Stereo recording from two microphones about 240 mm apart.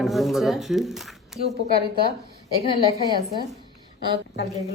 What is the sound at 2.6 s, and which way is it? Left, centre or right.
Speech, left.